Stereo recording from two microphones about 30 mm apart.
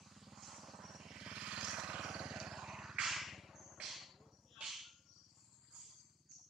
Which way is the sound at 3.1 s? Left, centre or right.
Centre.